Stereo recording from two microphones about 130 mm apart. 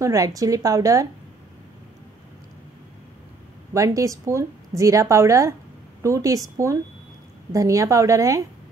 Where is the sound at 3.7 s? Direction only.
25° right (ahead or behind).